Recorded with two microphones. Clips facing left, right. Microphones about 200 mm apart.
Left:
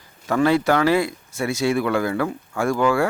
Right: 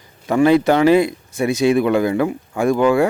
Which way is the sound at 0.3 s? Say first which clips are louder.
Right 5 dB; 15° right (ahead or behind).